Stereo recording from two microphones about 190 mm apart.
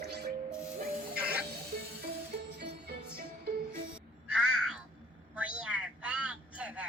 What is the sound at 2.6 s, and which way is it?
Jingle bell, 60° right (ahead or behind).